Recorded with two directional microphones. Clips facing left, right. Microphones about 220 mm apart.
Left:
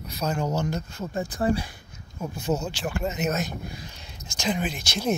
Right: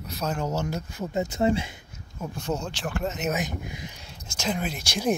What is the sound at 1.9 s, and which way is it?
Speech, centre (ahead or behind).